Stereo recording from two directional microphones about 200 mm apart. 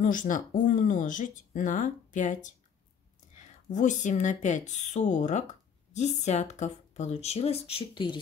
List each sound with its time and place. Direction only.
0.0 s speech: 40° left (ahead or behind); by 8.2 s 25° left (ahead or behind)